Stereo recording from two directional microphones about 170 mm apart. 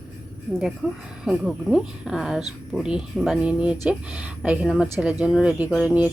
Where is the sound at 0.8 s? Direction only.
5° right (ahead or behind).